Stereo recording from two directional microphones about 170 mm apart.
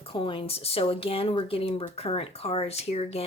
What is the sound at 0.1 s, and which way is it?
Speech, 30° left (ahead or behind).